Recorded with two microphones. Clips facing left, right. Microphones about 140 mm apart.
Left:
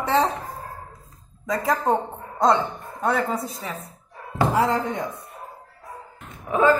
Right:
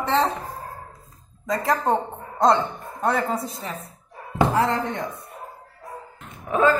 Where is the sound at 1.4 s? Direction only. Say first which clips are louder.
Even; centre (ahead or behind).